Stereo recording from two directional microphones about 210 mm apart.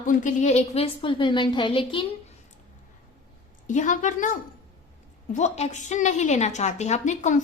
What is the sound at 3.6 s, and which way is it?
Speech, 35° left (ahead or behind).